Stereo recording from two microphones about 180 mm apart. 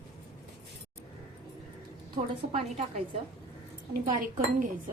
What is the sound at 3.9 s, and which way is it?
Speech, 50° right (ahead or behind).